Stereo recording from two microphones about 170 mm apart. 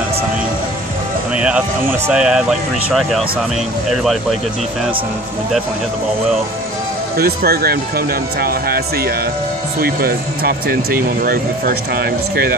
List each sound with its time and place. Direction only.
1.3 s speech: 5° right (ahead or behind)
7.2 s speech: 65° right (ahead or behind)